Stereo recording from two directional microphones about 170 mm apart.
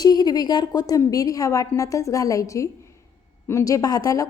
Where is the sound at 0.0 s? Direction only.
25° left (ahead or behind).